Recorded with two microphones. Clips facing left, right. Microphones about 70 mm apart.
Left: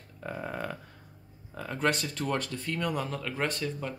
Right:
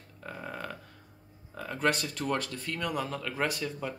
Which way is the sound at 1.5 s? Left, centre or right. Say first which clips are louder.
Even; centre.